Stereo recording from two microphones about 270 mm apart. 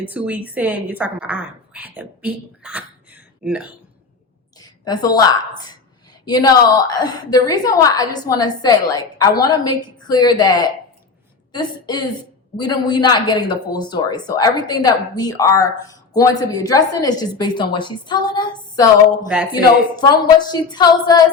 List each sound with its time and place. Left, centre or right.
0.0 s a woman's voice: centre
4.5 s a woman's voice: centre
20.0 s a woman's voice: centre